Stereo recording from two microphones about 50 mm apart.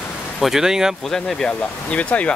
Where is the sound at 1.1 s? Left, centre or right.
Centre.